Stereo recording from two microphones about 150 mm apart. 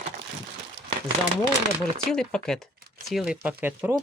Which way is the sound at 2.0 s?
5° left (ahead or behind).